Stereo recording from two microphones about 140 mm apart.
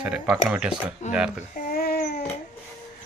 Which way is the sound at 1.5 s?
80° left.